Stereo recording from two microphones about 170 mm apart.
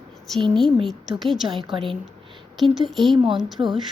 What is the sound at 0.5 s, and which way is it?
Speech, centre (ahead or behind).